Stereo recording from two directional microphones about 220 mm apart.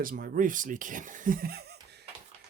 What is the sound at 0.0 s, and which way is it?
Speech, 40° right (ahead or behind).